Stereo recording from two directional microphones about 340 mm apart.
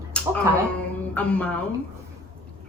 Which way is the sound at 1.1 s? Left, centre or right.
Centre.